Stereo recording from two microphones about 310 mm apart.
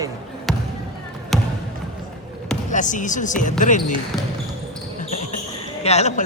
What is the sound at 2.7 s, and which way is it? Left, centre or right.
A man's voice, left.